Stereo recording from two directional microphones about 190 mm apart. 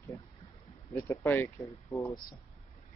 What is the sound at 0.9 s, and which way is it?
Speech, 15° left (ahead or behind).